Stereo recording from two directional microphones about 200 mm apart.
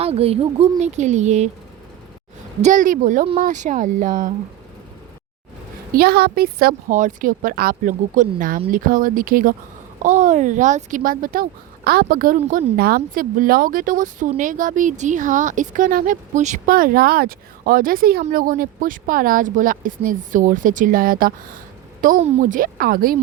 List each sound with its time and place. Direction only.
0.0 s speech: 30° right (ahead or behind)
2.6 s speech: 40° right (ahead or behind)
5.9 s speech: 50° right (ahead or behind)